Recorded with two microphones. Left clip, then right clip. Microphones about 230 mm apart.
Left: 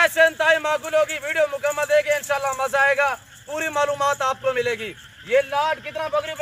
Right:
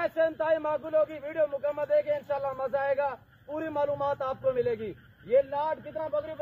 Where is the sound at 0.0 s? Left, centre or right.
Centre.